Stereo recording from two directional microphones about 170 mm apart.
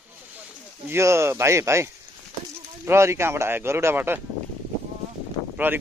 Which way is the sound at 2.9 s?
15° right (ahead or behind).